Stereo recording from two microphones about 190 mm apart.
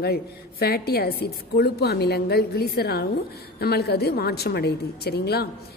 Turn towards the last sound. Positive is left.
turn(degrees=55)  # may be behind; listen again after turning